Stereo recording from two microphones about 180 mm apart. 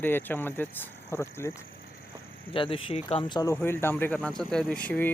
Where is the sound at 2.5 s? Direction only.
30° left (ahead or behind).